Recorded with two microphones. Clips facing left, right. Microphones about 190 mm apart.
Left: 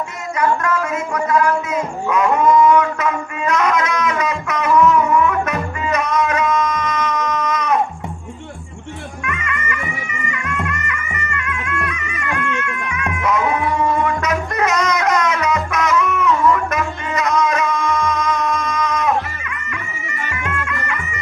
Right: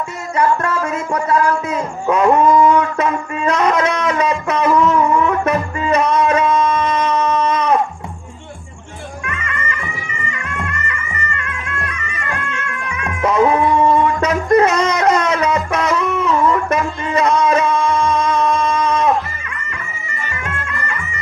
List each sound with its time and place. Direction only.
0.3 s music: 30° right (ahead or behind)
9.2 s music: 30° right (ahead or behind)
13.2 s a sound: 30° right (ahead or behind)
20.3 s music: 30° right (ahead or behind)